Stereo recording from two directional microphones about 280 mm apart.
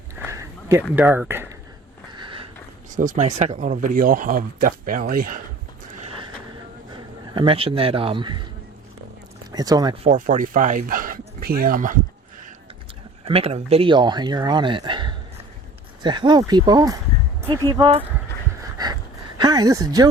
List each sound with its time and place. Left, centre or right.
0.3 s a sound: centre
0.9 s speech: centre
2.1 s a sound: centre
2.9 s speech: right
7.3 s speech: centre
9.5 s speech: centre
10.1 s speech: right
13.2 s speech: right
19.4 s a woman's voice: centre